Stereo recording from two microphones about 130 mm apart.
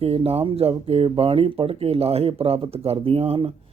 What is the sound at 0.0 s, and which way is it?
Speech, 50° right (ahead or behind).